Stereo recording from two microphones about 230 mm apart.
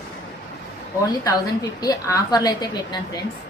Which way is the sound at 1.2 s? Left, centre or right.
Centre.